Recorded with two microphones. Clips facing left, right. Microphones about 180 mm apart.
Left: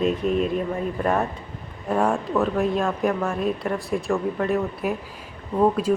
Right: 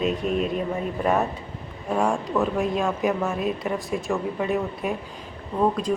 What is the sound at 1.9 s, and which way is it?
Speech, centre (ahead or behind).